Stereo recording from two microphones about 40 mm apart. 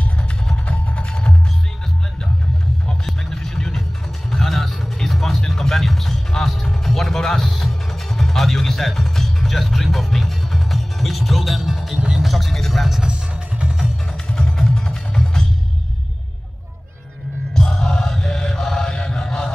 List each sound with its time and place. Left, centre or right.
0.7 s music: left
3.3 s music: centre
12.2 s vehicle: centre
13.1 s music: right
14.3 s music: centre
17.6 s mantra: centre